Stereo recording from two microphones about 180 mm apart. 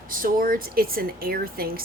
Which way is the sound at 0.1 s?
50° right (ahead or behind).